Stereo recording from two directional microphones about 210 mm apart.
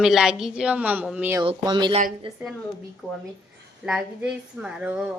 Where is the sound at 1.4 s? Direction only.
20° right (ahead or behind).